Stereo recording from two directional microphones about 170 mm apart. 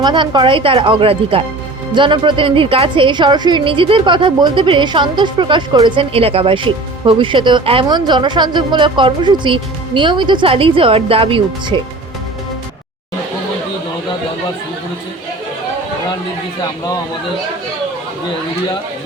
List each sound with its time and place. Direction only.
0.0 s a woman's voice: 25° right (ahead or behind)